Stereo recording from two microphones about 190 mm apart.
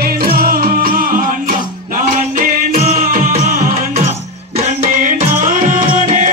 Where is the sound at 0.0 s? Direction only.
55° right (ahead or behind).